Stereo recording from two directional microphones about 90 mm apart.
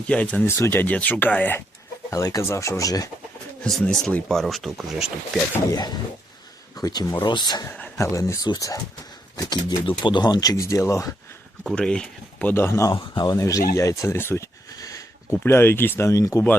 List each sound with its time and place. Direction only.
0.1 s speech: 15° left (ahead or behind)
0.4 s speech: 25° left (ahead or behind)
2.0 s speech: 40° left (ahead or behind)
4.1 s speech: 5° left (ahead or behind)
5.7 s speech: 50° left (ahead or behind)
7.9 s speech: 35° left (ahead or behind); by 9.7 s 50° left (ahead or behind)
9.8 s speech: 65° left (ahead or behind); by 11.1 s 35° left (ahead or behind)
11.6 s speech: 10° left (ahead or behind)
12.5 s speech: 25° left (ahead or behind)
12.9 s speech: 65° left (ahead or behind)
13.2 s speech: 40° left (ahead or behind)
15.4 s speech: 25° left (ahead or behind)